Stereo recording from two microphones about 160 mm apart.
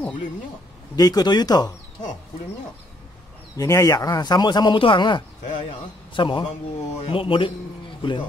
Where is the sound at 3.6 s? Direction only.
20° left (ahead or behind).